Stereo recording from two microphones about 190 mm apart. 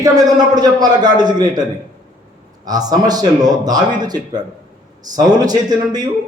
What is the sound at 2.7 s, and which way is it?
A man's voice, 20° right (ahead or behind).